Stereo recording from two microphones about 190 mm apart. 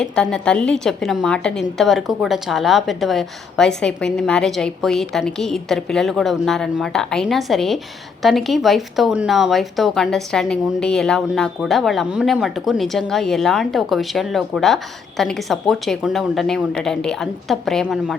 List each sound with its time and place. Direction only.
0.0 s speech: 5° left (ahead or behind)